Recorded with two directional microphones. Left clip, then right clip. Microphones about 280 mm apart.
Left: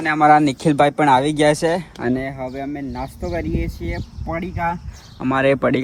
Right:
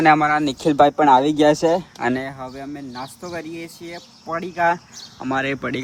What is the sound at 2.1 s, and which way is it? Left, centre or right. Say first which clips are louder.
Speech: left 3 dB; left.